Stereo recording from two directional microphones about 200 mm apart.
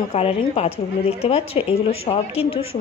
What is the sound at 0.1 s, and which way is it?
A woman's voice, 30° left (ahead or behind).